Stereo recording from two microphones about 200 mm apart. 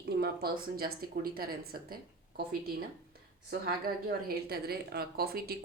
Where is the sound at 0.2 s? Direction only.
50° right (ahead or behind).